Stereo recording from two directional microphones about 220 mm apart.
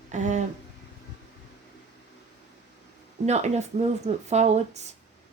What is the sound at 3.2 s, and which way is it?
Speech, 30° right (ahead or behind).